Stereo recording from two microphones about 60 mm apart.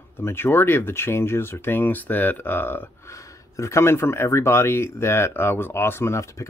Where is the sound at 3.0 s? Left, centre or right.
Left.